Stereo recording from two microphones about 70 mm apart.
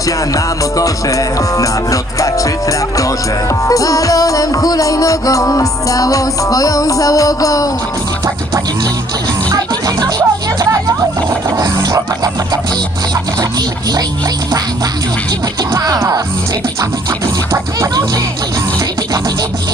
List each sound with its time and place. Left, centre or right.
0.3 s music: left
9.5 s music: right
11.5 s a sound: right
16.0 s speech: right
17.5 s speech: right